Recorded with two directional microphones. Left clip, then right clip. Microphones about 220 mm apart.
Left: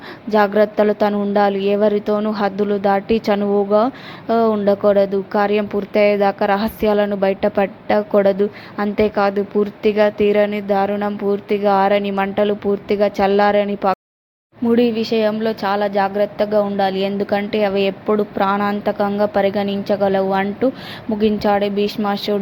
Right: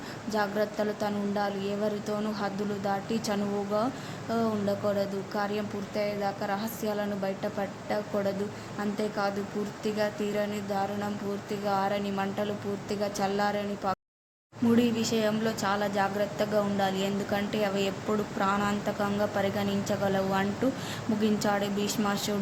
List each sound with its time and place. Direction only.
0.3 s a woman's voice: 30° left (ahead or behind)